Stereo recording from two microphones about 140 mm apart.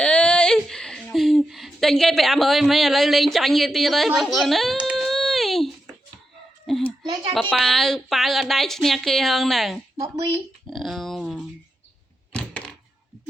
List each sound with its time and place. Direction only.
0.0 s a sound: 10° left (ahead or behind)
6.7 s a child's voice: centre (ahead or behind)
7.0 s speech: 30° right (ahead or behind)
7.5 s a woman's voice: centre (ahead or behind)
10.7 s a sound: centre (ahead or behind)
12.3 s thunk: 10° left (ahead or behind)